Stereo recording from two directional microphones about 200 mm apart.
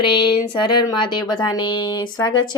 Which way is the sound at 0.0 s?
25° left (ahead or behind).